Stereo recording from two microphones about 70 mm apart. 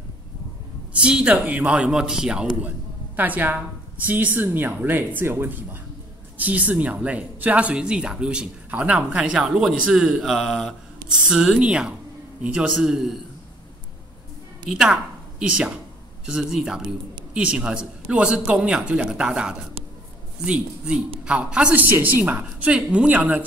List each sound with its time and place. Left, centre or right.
0.9 s a man's voice: centre
3.2 s a man's voice: right; by 10.7 s centre
11.1 s a man's voice: centre
14.7 s a woman's voice: centre
21.8 s speech: right